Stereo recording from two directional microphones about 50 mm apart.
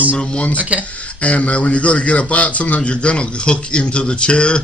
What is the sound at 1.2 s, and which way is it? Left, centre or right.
Speech, left.